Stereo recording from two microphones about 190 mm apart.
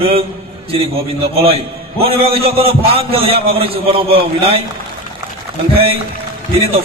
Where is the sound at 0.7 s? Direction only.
30° right (ahead or behind).